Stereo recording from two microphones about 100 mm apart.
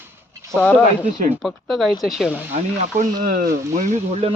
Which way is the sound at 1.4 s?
Centre (ahead or behind).